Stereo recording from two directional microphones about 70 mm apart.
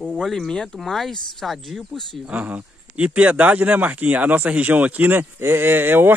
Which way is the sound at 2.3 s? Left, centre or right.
Right.